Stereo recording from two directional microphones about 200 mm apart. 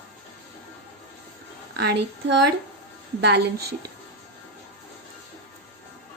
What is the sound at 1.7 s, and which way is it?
Speech, 55° right (ahead or behind).